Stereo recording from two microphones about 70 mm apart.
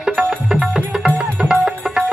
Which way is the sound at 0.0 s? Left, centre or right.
Centre.